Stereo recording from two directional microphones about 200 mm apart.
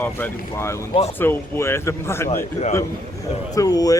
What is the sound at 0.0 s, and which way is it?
A man's voice, 10° left (ahead or behind).